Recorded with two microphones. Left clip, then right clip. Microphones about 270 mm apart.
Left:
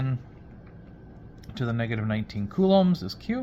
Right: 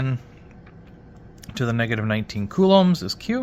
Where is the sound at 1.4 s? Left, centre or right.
Right.